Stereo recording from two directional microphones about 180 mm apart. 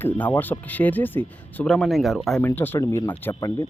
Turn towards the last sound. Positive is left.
turn(degrees=20)  # may be behind; listen again after turning